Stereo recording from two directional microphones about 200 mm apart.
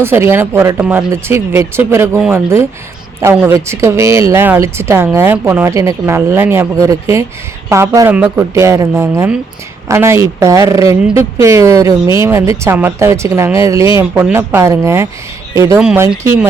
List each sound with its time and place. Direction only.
0.0 s speech: 10° right (ahead or behind)